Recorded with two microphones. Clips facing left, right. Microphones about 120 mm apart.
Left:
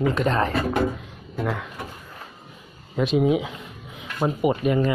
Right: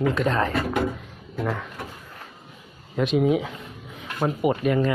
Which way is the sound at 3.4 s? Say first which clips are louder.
Even; 10° left (ahead or behind).